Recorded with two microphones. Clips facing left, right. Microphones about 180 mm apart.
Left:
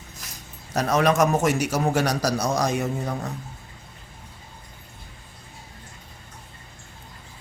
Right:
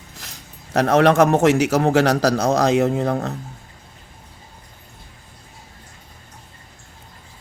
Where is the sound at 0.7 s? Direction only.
60° right (ahead or behind).